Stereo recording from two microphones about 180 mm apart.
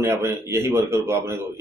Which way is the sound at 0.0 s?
15° right (ahead or behind).